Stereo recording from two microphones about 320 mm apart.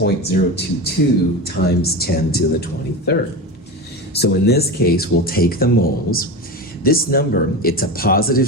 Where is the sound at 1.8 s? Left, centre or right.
Left.